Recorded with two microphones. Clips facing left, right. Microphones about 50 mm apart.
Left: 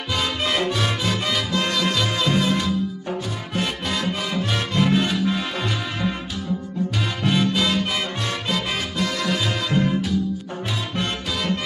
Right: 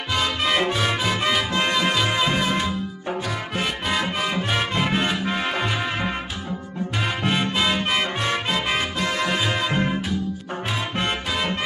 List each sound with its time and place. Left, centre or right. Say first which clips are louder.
0.1 s music: right 1 dB; centre; by 6.1 s right
7.2 s music: left 2 dB; right